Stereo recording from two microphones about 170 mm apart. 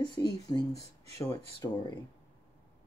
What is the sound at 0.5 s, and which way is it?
Speech, 20° left (ahead or behind).